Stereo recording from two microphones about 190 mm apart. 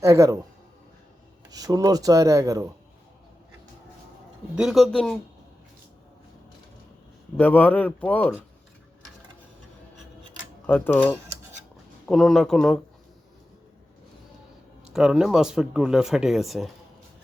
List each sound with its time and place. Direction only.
0.0 s speech: 15° right (ahead or behind)
1.5 s speech: 20° right (ahead or behind)
4.5 s speech: centre (ahead or behind)
7.3 s speech: 10° left (ahead or behind)
10.7 s speech: 10° left (ahead or behind)
12.0 s speech: centre (ahead or behind)
14.8 s speech: 5° right (ahead or behind)